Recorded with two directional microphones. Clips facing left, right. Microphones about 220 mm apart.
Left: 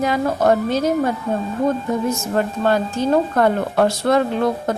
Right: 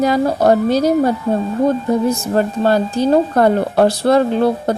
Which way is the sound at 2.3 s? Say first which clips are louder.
Right 3 dB; 35° right (ahead or behind).